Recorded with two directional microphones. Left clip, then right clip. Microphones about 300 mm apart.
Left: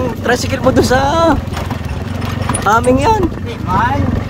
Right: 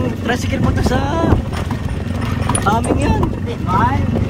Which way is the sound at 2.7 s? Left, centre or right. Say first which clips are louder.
Left 8 dB; centre.